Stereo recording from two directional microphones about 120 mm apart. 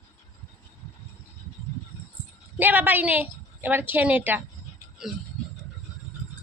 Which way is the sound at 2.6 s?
15° right (ahead or behind).